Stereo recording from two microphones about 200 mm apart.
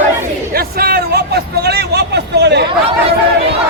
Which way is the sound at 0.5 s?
50° right (ahead or behind).